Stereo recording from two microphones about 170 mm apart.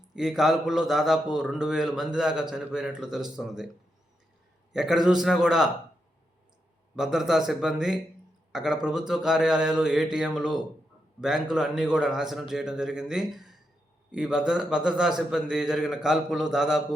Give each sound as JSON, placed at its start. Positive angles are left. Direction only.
{"t": 0.2, "sound": "a man's voice", "side_deg": 0}
{"t": 4.7, "sound": "a man's voice", "side_deg": 0}
{"t": 6.9, "sound": "a man's voice", "side_deg": -5}